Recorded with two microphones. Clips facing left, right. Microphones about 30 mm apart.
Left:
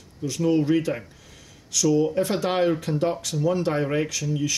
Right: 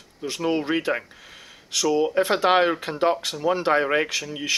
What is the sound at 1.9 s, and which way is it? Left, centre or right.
Speech, right.